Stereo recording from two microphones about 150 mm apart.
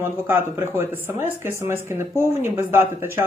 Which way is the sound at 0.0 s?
15° right (ahead or behind).